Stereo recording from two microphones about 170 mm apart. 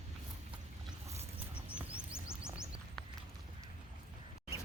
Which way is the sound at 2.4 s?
5° right (ahead or behind).